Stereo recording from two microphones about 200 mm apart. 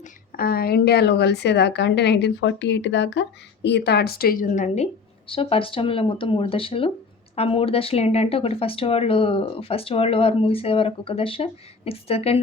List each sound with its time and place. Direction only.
0.3 s a woman's voice: 50° left (ahead or behind); by 12.4 s 30° left (ahead or behind)